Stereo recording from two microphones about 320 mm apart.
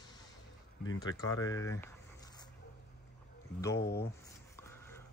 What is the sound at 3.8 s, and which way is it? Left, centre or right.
Speech, left.